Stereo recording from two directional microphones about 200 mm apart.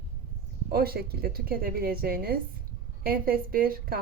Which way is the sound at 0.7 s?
50° right (ahead or behind).